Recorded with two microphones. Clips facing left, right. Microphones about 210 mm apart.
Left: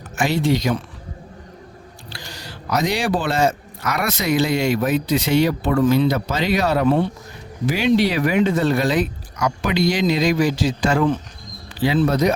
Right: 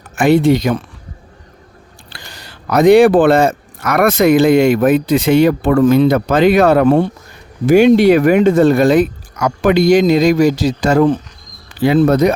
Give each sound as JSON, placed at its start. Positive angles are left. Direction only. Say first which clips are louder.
{"t": 0.2, "sound": "speech", "louder": "right 9 dB", "side_deg": -55}
{"t": 2.0, "sound": "speech", "louder": "left 1 dB", "side_deg": -55}
{"t": 11.8, "sound": "speech", "louder": "right 7 dB", "side_deg": -50}